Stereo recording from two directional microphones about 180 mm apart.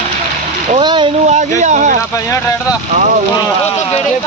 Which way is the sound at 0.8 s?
25° right (ahead or behind).